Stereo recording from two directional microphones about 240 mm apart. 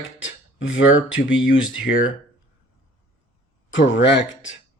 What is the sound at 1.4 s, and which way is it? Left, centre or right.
Speech, centre.